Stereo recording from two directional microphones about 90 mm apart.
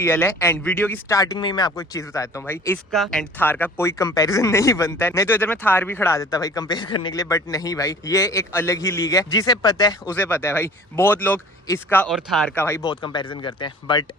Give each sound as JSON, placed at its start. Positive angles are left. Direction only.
{"t": 0.0, "sound": "speech", "side_deg": 25}
{"t": 1.0, "sound": "a man's voice", "side_deg": 40}
{"t": 1.4, "sound": "speech", "side_deg": 55}
{"t": 1.7, "sound": "a man's voice", "side_deg": 35}
{"t": 2.9, "sound": "speech", "side_deg": 5}
{"t": 3.3, "sound": "speech", "side_deg": 20}
{"t": 6.1, "sound": "a man's voice", "side_deg": 40}
{"t": 6.7, "sound": "speech", "side_deg": 60}
{"t": 7.1, "sound": "a man's voice", "side_deg": 40}
{"t": 10.1, "sound": "speech", "side_deg": 25}
{"t": 11.7, "sound": "a man's voice", "side_deg": 35}
{"t": 12.1, "sound": "speech", "side_deg": 5}
{"t": 12.5, "sound": "speech", "side_deg": 30}
{"t": 12.8, "sound": "speech", "side_deg": 60}